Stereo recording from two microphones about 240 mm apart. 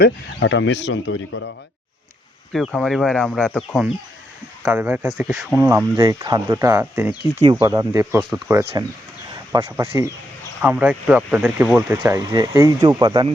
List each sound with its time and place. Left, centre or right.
0.0 s speech: left
2.5 s speech: centre
7.3 s speech: centre